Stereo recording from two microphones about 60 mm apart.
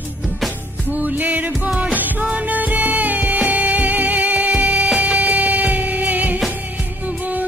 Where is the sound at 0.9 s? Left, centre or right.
Right.